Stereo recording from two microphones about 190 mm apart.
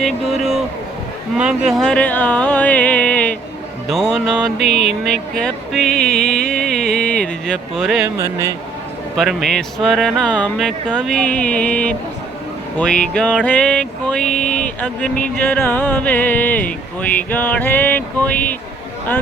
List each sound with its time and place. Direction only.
0.0 s speech: centre (ahead or behind)
1.4 s music: 5° right (ahead or behind)
3.8 s speech: centre (ahead or behind)
5.4 s music: 5° left (ahead or behind)
8.2 s speech: 15° right (ahead or behind)
9.1 s speech: centre (ahead or behind)
12.7 s music: 5° left (ahead or behind)